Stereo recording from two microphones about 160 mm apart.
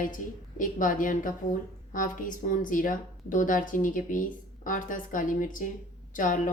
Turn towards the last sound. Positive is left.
turn(degrees=55)  # may be behind; listen again after turning